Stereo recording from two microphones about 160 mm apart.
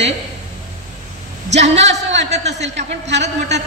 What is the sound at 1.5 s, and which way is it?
Speech, 45° right (ahead or behind).